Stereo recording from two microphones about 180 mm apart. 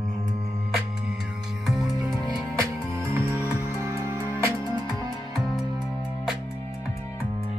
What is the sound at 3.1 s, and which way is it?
Music, 15° right (ahead or behind).